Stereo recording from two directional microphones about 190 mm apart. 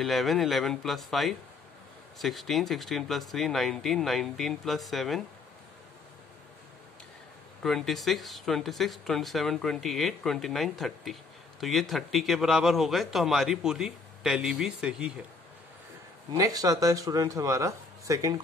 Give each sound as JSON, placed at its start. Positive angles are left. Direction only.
{"t": 0.0, "sound": "speech", "side_deg": 0}
{"t": 7.6, "sound": "speech", "side_deg": 0}
{"t": 16.3, "sound": "speech", "side_deg": -20}